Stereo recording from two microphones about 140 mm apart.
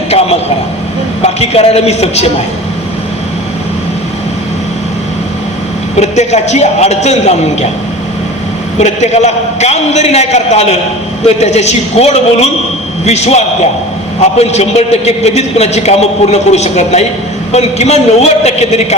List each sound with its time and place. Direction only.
0.1 s a sound: 45° left (ahead or behind)
1.2 s a man's voice: 50° left (ahead or behind)
6.0 s a man's voice: 55° left (ahead or behind)
8.8 s a man's voice: 55° left (ahead or behind)